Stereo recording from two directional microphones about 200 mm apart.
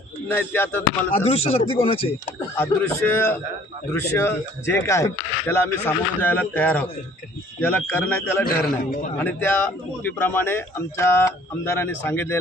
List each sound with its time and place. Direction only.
0.3 s speech: 10° left (ahead or behind)
1.1 s speech: 30° left (ahead or behind)
2.6 s speech: 10° left (ahead or behind)
8.8 s a man's voice: 40° left (ahead or behind)
9.1 s speech: 10° left (ahead or behind)